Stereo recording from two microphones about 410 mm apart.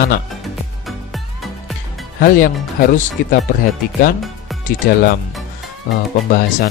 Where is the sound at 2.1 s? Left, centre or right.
Left.